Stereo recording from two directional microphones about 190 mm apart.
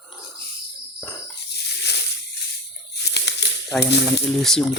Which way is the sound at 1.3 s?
60° left (ahead or behind).